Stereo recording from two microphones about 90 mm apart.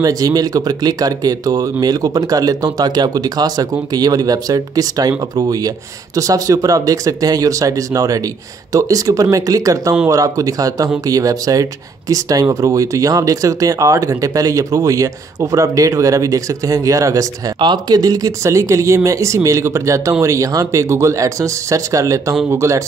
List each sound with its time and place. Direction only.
0.0 s speech: 45° right (ahead or behind)
17.6 s speech: 55° right (ahead or behind); by 22.8 s 35° right (ahead or behind)